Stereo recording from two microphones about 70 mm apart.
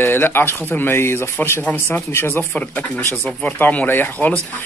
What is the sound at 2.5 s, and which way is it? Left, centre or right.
Speech, left.